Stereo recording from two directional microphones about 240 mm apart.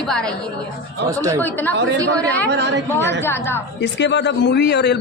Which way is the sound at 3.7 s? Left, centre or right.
Left.